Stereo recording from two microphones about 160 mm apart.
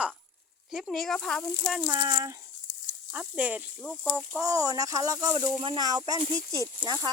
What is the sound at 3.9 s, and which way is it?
Speech, centre (ahead or behind).